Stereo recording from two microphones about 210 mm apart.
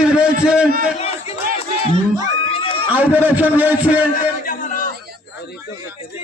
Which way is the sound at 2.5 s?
25° left (ahead or behind).